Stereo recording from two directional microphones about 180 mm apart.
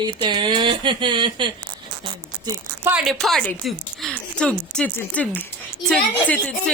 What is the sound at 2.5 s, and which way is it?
Speech, 15° right (ahead or behind).